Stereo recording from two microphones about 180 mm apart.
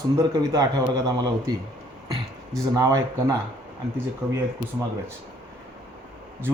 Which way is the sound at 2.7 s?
20° right (ahead or behind).